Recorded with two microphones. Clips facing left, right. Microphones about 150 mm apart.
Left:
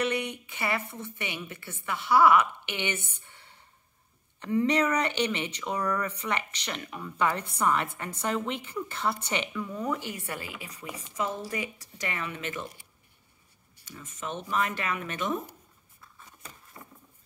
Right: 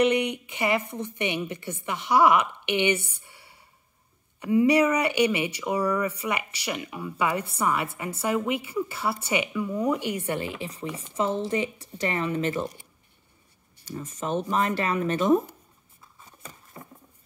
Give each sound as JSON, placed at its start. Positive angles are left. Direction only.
{"t": 0.0, "sound": "a woman's voice", "side_deg": -15}
{"t": 13.8, "sound": "speech", "side_deg": -35}